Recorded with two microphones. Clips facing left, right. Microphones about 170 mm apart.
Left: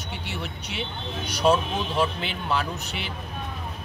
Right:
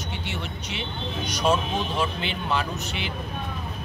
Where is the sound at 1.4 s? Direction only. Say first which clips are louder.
Left 2 dB; 5° left (ahead or behind).